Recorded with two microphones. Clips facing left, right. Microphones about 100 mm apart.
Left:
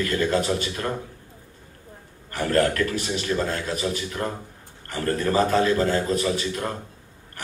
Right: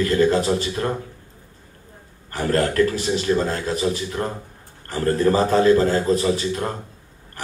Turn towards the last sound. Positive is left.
turn(degrees=-30)  # may be behind; listen again after turning